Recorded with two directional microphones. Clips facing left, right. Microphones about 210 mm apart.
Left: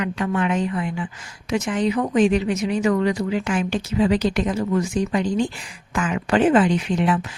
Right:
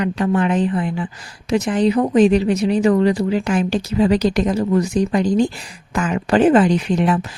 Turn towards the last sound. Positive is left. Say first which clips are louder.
# right 3 dB
turn(degrees=-40)  # may be behind; listen again after turning